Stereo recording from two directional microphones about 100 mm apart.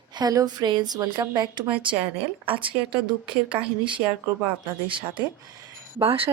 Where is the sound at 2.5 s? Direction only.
60° right (ahead or behind).